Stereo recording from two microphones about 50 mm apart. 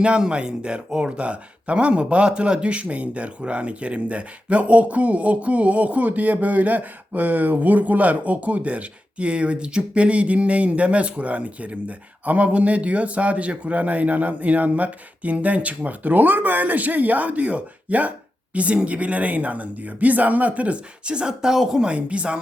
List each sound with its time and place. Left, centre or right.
0.0 s speech: right
21.8 s speech: right